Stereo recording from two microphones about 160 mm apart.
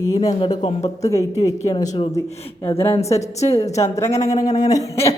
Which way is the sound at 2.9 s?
40° left (ahead or behind).